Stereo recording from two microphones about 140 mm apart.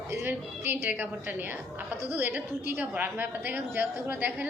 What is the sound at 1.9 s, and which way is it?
Speech, 20° left (ahead or behind).